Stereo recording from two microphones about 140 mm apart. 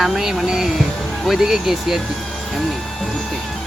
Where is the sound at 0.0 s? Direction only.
Centre (ahead or behind).